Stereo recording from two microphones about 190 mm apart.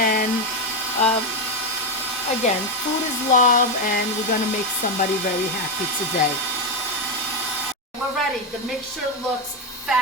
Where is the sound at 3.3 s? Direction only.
45° left (ahead or behind).